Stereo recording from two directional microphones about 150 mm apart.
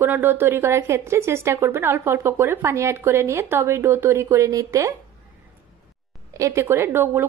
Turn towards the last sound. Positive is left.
turn(degrees=-15)  # may be behind; listen again after turning